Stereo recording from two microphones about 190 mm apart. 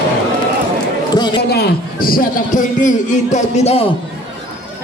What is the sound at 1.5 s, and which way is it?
A man's voice, 55° left (ahead or behind).